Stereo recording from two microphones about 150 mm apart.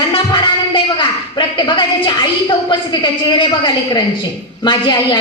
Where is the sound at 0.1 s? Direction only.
30° left (ahead or behind).